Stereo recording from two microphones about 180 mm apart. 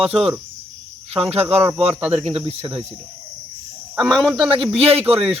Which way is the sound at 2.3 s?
35° right (ahead or behind).